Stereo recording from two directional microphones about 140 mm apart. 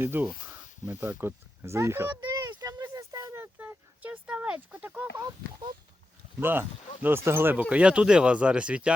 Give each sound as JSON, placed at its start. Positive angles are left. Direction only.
{"t": 0.0, "sound": "speech", "side_deg": -15}
{"t": 2.0, "sound": "a sound", "side_deg": -30}
{"t": 5.2, "sound": "speech", "side_deg": -30}
{"t": 6.4, "sound": "speech", "side_deg": -15}